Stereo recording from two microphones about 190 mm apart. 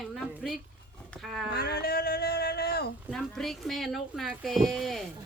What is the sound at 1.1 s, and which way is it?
Speech, centre (ahead or behind).